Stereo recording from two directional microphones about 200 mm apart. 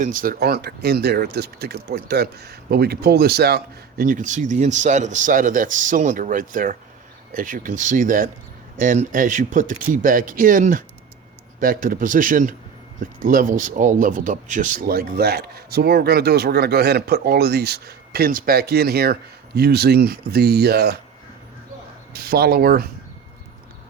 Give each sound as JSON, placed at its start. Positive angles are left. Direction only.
{"t": 0.0, "sound": "speech", "side_deg": -40}
{"t": 22.1, "sound": "speech", "side_deg": -50}